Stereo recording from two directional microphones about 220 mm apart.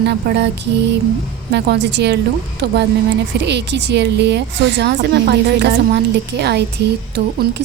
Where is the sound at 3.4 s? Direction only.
50° right (ahead or behind).